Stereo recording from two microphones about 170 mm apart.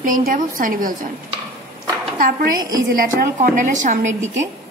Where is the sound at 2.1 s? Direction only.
55° right (ahead or behind).